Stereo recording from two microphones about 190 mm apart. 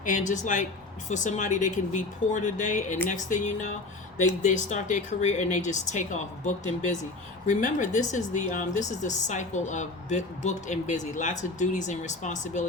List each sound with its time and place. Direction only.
0.0 s a woman's voice: 45° left (ahead or behind)